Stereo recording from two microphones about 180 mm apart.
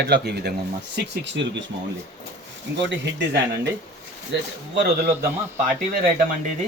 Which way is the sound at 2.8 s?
90° right.